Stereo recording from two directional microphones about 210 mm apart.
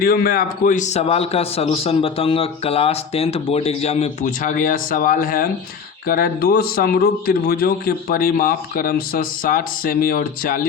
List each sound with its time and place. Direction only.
0.0 s a man's voice: 45° left (ahead or behind)